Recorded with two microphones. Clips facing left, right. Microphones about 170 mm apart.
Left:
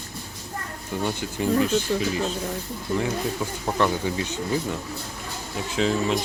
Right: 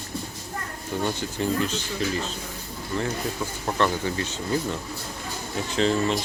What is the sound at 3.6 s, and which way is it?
Speech, 10° left (ahead or behind).